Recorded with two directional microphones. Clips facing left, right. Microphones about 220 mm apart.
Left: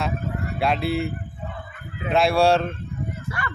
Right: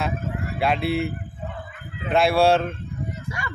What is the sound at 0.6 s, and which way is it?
Speech, centre (ahead or behind).